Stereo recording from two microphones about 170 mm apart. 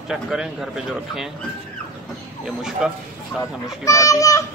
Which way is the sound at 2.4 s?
5° right (ahead or behind).